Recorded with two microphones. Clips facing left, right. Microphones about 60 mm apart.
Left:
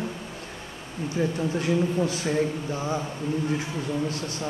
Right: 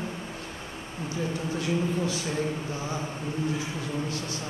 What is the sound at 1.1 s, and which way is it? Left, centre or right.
Speech, left.